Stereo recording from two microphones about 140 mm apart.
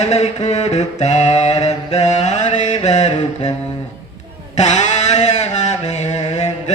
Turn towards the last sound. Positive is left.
turn(degrees=55)  # may be behind; listen again after turning